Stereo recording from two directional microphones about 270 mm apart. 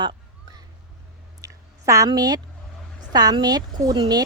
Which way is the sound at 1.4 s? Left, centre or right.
Centre.